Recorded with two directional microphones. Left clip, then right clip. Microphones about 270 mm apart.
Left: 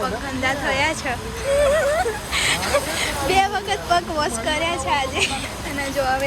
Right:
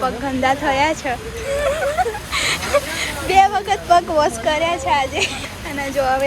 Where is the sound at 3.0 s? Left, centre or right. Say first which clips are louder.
Right 7 dB; centre.